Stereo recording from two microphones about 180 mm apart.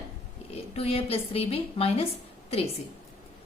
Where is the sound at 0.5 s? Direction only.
35° left (ahead or behind).